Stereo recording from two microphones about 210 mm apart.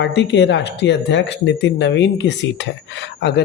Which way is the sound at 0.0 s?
55° left (ahead or behind).